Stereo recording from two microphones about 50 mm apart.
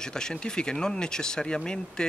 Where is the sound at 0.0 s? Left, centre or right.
Centre.